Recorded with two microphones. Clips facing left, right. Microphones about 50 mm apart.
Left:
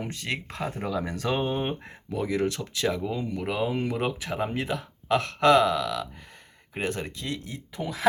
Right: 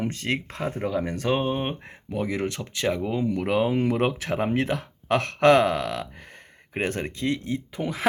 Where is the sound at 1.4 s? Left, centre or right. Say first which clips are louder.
Right 2 dB; centre.